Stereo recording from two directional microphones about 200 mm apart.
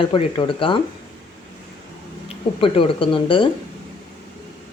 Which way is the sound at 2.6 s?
25° left (ahead or behind).